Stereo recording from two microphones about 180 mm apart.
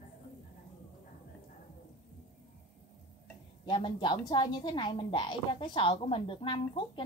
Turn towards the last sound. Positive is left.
turn(degrees=30)  # may be behind; listen again after turning